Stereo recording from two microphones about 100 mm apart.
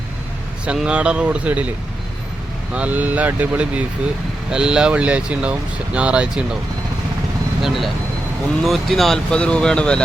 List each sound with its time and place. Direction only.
0.6 s speech: 10° right (ahead or behind)
2.7 s speech: 15° right (ahead or behind)
7.6 s speech: centre (ahead or behind)